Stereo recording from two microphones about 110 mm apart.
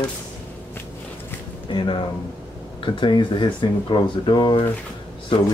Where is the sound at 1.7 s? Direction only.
50° left (ahead or behind).